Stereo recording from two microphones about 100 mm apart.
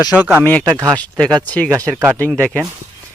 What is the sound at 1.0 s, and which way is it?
Speech, 10° left (ahead or behind).